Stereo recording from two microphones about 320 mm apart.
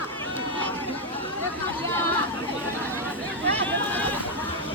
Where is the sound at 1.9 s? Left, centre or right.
Centre.